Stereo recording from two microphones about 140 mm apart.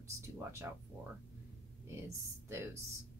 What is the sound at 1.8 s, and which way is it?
Speech, 20° right (ahead or behind).